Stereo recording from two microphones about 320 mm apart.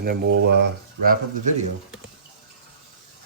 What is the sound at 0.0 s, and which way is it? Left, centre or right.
Speech, right.